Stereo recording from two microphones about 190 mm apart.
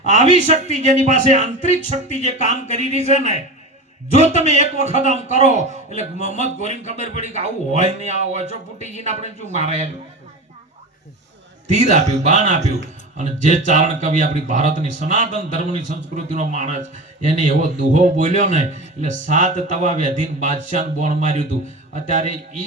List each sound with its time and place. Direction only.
0.1 s a man's voice: 40° right (ahead or behind)
4.4 s a man's voice: 35° right (ahead or behind)
11.7 s a man's voice: 40° right (ahead or behind)